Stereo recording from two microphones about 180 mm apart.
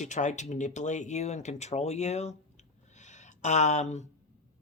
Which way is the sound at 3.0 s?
40° left (ahead or behind).